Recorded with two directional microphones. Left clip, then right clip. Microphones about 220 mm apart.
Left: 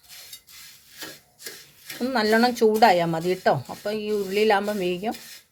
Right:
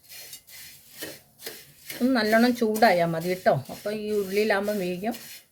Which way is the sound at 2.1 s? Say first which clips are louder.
Left 2 dB; 45° left (ahead or behind).